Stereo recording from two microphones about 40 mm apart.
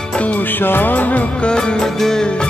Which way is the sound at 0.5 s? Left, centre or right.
Left.